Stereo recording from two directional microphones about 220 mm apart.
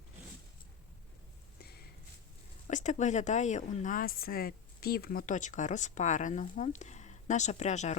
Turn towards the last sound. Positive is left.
turn(degrees=30)  # may be behind; listen again after turning